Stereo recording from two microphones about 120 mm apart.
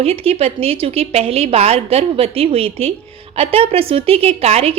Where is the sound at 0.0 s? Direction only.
55° right (ahead or behind).